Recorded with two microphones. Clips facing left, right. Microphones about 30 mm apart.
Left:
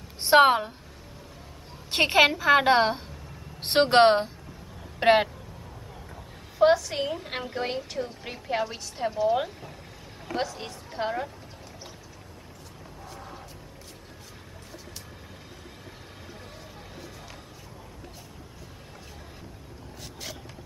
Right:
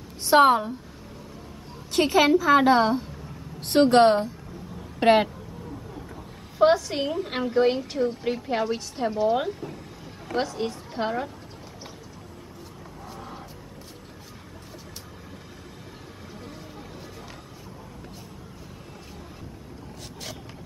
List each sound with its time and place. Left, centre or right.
0.2 s a woman's voice: left
1.9 s a woman's voice: left
5.0 s speech: centre
6.6 s a woman's voice: centre
13.0 s a sound: centre